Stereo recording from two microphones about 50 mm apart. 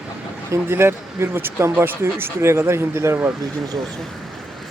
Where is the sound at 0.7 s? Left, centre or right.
Right.